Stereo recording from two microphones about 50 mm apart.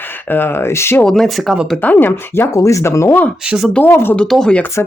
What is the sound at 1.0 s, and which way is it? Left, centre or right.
Speech, centre.